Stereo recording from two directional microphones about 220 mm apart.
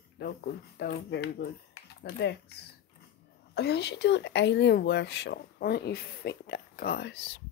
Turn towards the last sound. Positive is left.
turn(degrees=50)  # may be behind; listen again after turning